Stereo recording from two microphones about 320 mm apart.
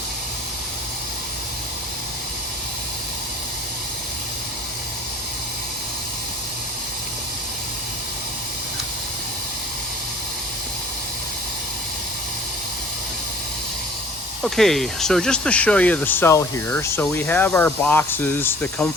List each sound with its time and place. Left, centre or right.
14.4 s speech: centre